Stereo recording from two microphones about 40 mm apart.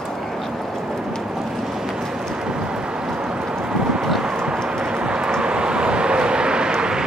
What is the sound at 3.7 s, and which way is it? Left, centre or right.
Vehicle, right.